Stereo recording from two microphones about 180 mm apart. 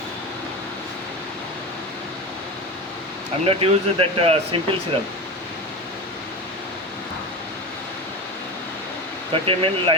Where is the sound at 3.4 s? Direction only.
30° right (ahead or behind).